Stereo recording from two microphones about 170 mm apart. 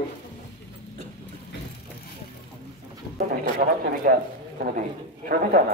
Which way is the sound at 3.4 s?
55° right (ahead or behind).